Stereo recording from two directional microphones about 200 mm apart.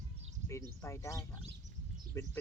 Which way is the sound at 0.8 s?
15° left (ahead or behind).